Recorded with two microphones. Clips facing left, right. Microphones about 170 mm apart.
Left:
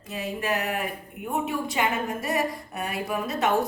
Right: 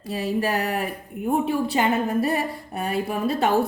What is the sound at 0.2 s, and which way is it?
A woman's voice, 35° right (ahead or behind).